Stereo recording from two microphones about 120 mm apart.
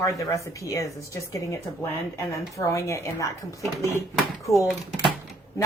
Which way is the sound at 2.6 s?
25° left (ahead or behind).